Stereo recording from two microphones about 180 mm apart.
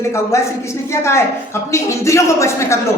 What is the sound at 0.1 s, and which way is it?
A woman's voice, 15° left (ahead or behind).